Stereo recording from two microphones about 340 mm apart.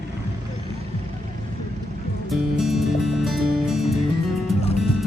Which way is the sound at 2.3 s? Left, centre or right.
Centre.